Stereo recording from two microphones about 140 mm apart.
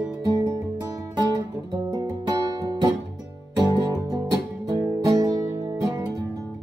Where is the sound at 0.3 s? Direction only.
30° right (ahead or behind).